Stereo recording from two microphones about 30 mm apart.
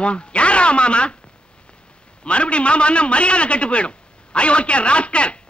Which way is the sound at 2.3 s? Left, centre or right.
Left.